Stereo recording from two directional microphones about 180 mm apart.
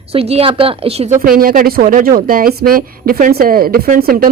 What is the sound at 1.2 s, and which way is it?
A woman's voice, 55° right (ahead or behind).